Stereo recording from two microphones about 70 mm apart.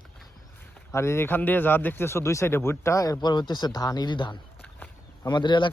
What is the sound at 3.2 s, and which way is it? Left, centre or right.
Speech, left.